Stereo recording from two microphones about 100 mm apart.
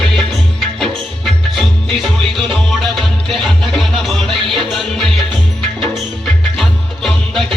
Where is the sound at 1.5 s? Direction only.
Centre (ahead or behind).